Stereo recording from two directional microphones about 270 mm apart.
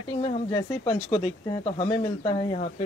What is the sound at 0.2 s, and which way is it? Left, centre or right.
Speech, centre.